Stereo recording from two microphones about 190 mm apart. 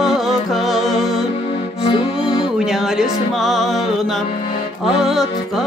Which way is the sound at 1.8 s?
30° left (ahead or behind).